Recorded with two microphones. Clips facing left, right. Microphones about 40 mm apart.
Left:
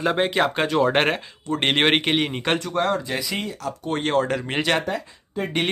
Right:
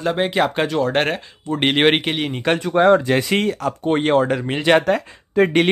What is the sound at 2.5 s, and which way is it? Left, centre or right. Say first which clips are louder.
Speech: right 11 dB; right.